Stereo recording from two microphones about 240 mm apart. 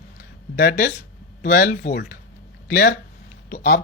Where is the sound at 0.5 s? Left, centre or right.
Left.